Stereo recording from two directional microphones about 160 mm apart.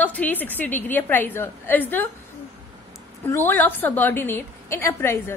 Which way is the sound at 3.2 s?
15° left (ahead or behind).